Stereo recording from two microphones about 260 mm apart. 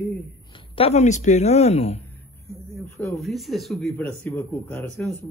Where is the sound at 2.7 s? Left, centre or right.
Centre.